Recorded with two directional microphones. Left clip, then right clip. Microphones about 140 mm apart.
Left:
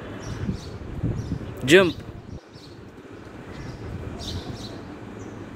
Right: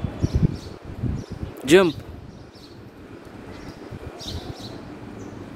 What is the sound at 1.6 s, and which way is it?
Speech, 35° right (ahead or behind).